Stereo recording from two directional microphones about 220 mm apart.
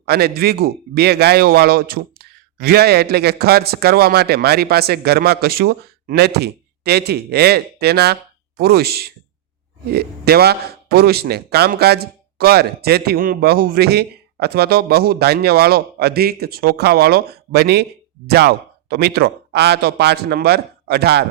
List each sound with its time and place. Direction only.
0.0 s a man's voice: 45° right (ahead or behind)